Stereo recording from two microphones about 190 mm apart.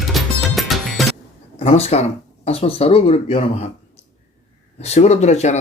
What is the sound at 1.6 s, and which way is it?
Speech, 35° left (ahead or behind).